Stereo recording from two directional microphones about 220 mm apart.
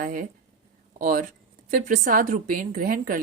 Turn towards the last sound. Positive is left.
turn(degrees=-40)  # may be behind; listen again after turning